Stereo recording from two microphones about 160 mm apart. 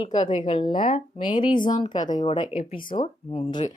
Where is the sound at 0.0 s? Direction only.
30° left (ahead or behind).